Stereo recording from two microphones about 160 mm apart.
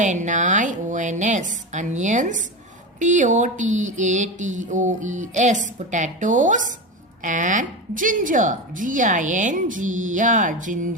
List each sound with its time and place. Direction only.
0.0 s a woman's voice: 50° right (ahead or behind)